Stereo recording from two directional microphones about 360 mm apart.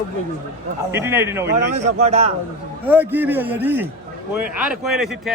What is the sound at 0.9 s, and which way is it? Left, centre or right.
Speech, centre.